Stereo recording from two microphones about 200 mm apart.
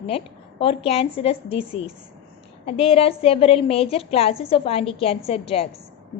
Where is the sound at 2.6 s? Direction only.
30° left (ahead or behind).